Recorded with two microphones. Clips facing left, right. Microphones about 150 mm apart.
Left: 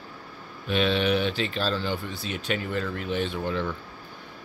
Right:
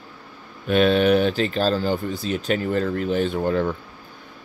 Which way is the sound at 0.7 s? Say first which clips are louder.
Right 7 dB; 45° right (ahead or behind).